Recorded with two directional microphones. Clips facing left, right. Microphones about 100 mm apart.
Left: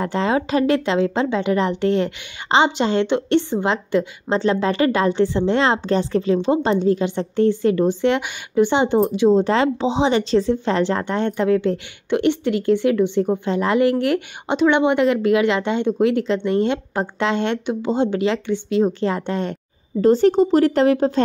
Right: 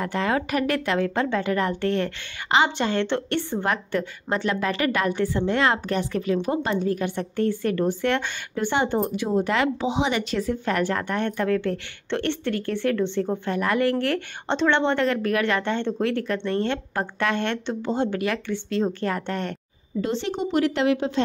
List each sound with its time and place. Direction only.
0.0 s a woman's voice: 25° left (ahead or behind)
20.0 s speech: 45° left (ahead or behind)